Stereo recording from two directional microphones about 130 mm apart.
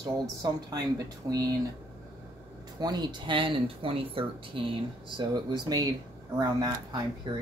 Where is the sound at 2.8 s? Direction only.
35° right (ahead or behind).